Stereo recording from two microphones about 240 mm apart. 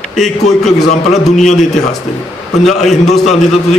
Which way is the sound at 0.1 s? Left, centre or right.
Centre.